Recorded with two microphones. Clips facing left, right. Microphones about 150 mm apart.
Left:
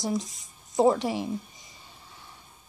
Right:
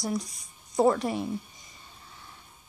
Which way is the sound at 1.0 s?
90° left.